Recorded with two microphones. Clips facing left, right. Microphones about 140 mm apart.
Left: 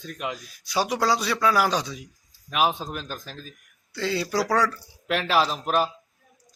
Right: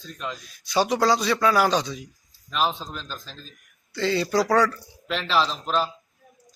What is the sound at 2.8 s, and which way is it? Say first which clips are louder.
Speech: left 3 dB; 55° left (ahead or behind).